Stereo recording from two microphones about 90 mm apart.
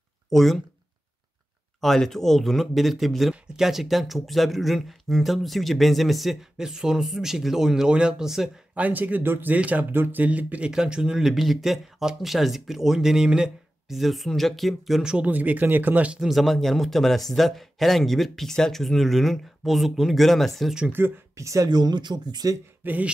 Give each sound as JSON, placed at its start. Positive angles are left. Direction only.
{"t": 0.3, "sound": "speech", "side_deg": 0}
{"t": 1.8, "sound": "speech", "side_deg": 5}
{"t": 8.7, "sound": "speech", "side_deg": -20}
{"t": 20.9, "sound": "speech", "side_deg": -30}
{"t": 21.6, "sound": "speech", "side_deg": -50}
{"t": 22.8, "sound": "speech", "side_deg": -15}